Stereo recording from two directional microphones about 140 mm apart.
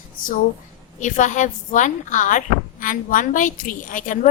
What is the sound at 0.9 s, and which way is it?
A woman's voice, 65° left (ahead or behind).